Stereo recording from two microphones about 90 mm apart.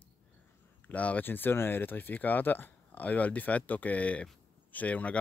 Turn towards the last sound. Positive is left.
turn(degrees=15)  # may be behind; listen again after turning